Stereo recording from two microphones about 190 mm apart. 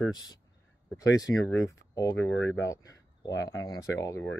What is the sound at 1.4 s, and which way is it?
Speech, 90° left.